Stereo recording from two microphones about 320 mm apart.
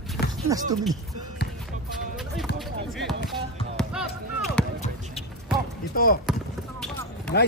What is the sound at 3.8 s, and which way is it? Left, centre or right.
Basketball bounce, centre.